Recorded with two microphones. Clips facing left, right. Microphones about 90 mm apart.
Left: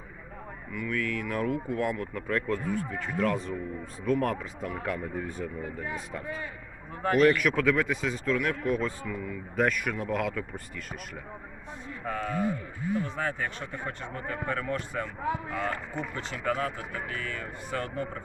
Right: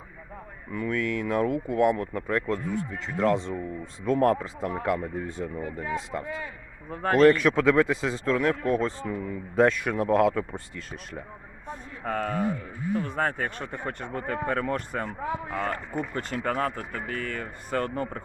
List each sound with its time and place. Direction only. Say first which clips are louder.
0.7 s speech: right 4 dB; 30° right (ahead or behind)
6.9 s speech: right 4 dB; 40° right (ahead or behind)
11.7 s speech: right 4 dB; 45° right (ahead or behind)